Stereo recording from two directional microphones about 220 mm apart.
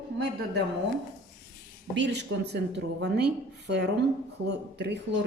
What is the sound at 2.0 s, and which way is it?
Speech, 50° right (ahead or behind).